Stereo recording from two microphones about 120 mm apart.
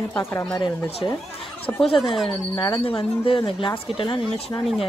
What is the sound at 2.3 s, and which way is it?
Speech, 40° left (ahead or behind).